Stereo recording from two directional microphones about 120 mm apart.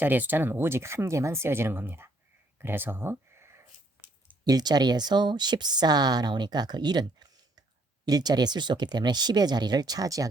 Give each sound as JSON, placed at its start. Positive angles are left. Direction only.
{"t": 0.0, "sound": "speech", "side_deg": -15}
{"t": 2.6, "sound": "a sound", "side_deg": -20}
{"t": 4.4, "sound": "speech", "side_deg": -35}